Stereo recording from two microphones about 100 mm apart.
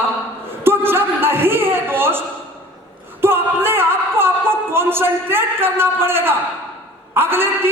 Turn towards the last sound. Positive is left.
turn(degrees=-20)  # may be behind; listen again after turning